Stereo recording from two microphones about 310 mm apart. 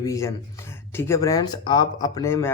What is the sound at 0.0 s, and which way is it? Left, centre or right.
A man's voice, centre.